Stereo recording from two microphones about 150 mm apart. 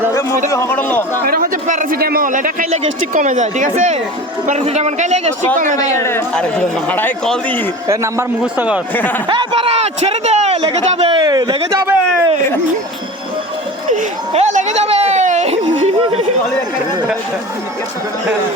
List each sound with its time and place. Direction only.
0.1 s a sound: 20° left (ahead or behind)
0.4 s a man's voice: 20° left (ahead or behind)
1.3 s a man's voice: 60° right (ahead or behind)
6.0 s a man's voice: 15° left (ahead or behind)
7.9 s a man's voice: 20° right (ahead or behind)
9.0 s a man's voice: 10° left (ahead or behind)
9.3 s a man's voice: 30° right (ahead or behind)
11.2 s a man's voice: 25° right (ahead or behind)
13.9 s a sound: 55° right (ahead or behind)